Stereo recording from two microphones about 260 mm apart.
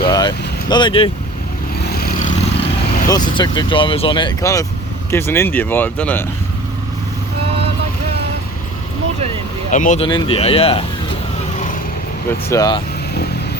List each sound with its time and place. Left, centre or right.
0.0 s vehicle: centre
1.9 s vehicle: left
3.1 s speech: centre
9.7 s speech: left
12.5 s speech: centre